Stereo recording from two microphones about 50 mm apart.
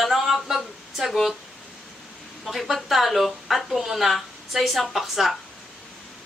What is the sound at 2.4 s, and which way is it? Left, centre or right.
A woman's voice, centre.